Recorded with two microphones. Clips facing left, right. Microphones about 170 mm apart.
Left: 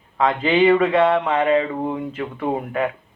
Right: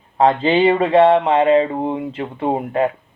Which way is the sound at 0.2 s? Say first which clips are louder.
Right 3 dB; 30° right (ahead or behind).